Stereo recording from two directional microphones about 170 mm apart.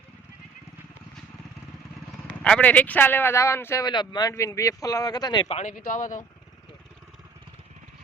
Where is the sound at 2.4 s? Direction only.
5° left (ahead or behind); by 5.4 s 25° left (ahead or behind).